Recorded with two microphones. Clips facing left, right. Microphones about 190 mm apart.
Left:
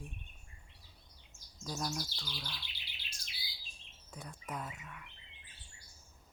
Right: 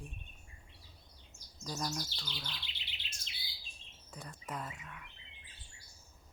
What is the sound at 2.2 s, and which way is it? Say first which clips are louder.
Bird: even; 10° left (ahead or behind).